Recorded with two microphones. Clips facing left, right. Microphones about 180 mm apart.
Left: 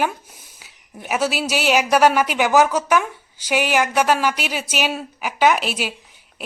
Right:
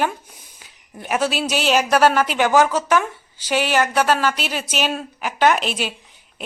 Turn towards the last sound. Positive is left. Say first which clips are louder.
# even
turn(degrees=10)  # may be behind; listen again after turning